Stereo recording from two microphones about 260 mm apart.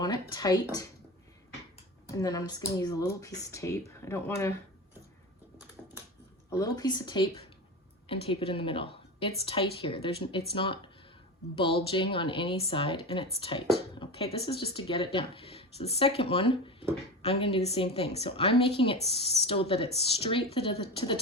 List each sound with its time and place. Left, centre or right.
0.0 s speech: centre
2.0 s speech: centre
6.5 s a woman's voice: centre